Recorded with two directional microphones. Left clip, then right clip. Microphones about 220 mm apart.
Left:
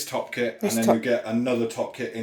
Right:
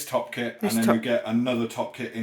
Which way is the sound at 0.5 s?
15° right (ahead or behind).